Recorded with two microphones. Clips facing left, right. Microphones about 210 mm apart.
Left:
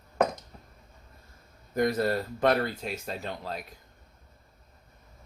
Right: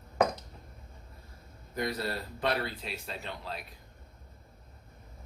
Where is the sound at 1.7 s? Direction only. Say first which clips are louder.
Left 8 dB; 45° left (ahead or behind).